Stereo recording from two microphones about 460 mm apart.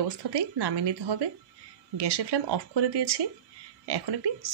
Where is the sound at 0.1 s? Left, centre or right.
Right.